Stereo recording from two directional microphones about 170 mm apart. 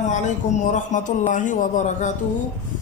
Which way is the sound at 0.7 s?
45° left (ahead or behind).